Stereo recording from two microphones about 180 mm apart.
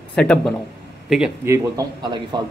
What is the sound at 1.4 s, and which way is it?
Speech, 20° right (ahead or behind).